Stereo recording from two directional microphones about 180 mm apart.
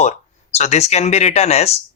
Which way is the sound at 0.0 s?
40° left (ahead or behind).